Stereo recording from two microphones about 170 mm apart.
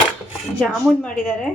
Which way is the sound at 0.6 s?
5° left (ahead or behind).